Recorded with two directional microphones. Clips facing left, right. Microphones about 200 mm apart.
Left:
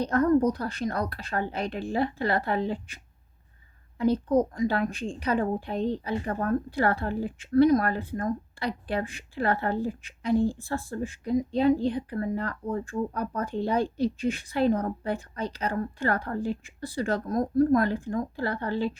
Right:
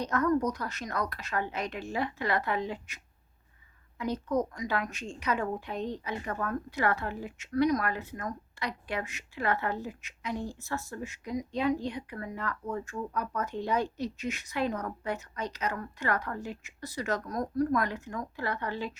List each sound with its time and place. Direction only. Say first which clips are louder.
0.0 s a woman's voice: left 5 dB; 30° left (ahead or behind)